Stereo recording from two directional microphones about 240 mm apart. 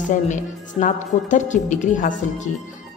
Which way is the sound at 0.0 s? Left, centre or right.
Left.